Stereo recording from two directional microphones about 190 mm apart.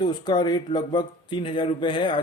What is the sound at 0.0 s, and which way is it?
Speech, 25° left (ahead or behind).